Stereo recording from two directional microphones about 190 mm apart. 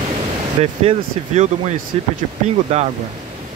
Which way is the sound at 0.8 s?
35° right (ahead or behind).